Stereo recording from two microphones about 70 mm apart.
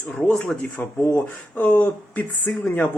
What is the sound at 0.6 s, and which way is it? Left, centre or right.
Speech, left.